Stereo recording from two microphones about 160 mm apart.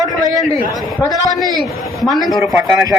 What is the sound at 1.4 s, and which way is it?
A man's voice, centre (ahead or behind).